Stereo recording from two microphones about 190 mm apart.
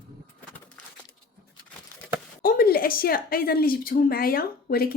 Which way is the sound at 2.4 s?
50° left (ahead or behind).